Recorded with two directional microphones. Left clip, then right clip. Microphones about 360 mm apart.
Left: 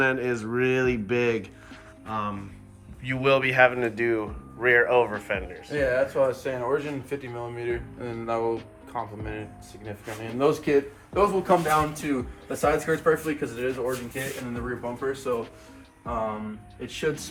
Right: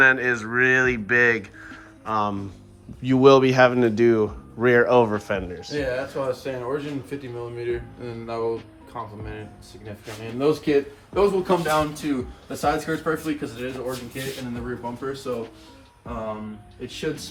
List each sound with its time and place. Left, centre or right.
0.0 s speech: centre
1.7 s music: centre
3.0 s a man's voice: centre
5.7 s speech: centre